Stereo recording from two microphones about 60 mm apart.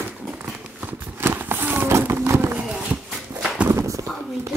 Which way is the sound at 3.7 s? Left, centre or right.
Right.